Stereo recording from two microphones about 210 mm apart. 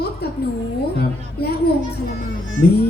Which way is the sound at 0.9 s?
50° left (ahead or behind).